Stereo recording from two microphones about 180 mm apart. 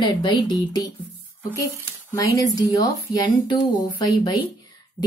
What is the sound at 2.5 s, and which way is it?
Speech, 20° left (ahead or behind).